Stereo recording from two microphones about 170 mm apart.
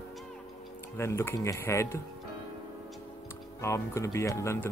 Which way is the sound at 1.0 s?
15° left (ahead or behind).